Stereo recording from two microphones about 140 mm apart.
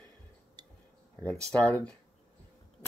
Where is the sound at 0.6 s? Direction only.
30° right (ahead or behind).